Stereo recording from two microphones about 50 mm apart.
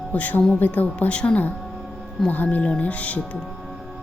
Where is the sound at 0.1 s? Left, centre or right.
Left.